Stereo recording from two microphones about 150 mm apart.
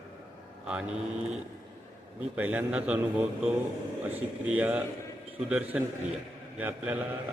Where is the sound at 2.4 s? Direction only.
10° right (ahead or behind).